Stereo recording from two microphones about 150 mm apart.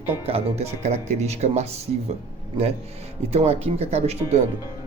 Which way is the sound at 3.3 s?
45° right (ahead or behind).